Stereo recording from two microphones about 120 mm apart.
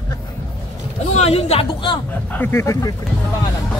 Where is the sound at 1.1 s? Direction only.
60° left (ahead or behind).